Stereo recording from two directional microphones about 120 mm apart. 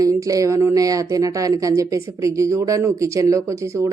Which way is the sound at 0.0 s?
30° right (ahead or behind).